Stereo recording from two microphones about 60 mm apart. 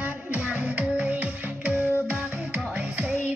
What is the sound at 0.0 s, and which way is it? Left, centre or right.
Music, right.